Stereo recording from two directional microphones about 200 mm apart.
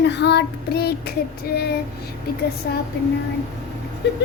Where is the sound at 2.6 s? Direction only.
55° left (ahead or behind).